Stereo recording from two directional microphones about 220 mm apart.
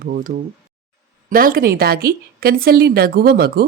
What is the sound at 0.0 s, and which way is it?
A woman's voice, 40° right (ahead or behind).